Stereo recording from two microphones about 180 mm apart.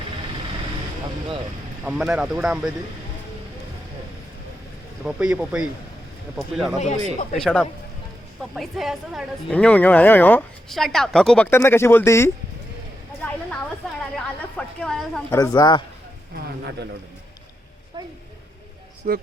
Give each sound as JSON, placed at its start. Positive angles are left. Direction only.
{"t": 1.8, "sound": "speech", "side_deg": -5}
{"t": 5.0, "sound": "speech", "side_deg": -5}
{"t": 6.7, "sound": "speech", "side_deg": 40}
{"t": 7.3, "sound": "speech", "side_deg": 5}
{"t": 11.5, "sound": "speech", "side_deg": 15}
{"t": 14.5, "sound": "a woman's voice", "side_deg": 5}
{"t": 15.4, "sound": "speech", "side_deg": 20}
{"t": 16.3, "sound": "speech", "side_deg": -65}
{"t": 18.0, "sound": "a sound", "side_deg": -25}
{"t": 19.1, "sound": "a man's voice", "side_deg": -45}